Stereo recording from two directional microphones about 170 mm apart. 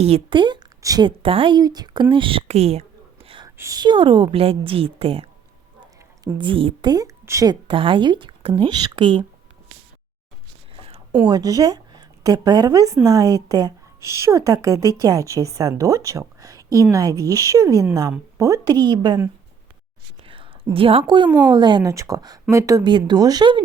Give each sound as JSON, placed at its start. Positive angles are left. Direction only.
{"t": 0.0, "sound": "a woman's voice", "side_deg": -30}
{"t": 7.7, "sound": "speech", "side_deg": -30}
{"t": 11.3, "sound": "a woman's voice", "side_deg": -20}
{"t": 20.2, "sound": "whispering", "side_deg": -30}
{"t": 20.7, "sound": "a woman's voice", "side_deg": -30}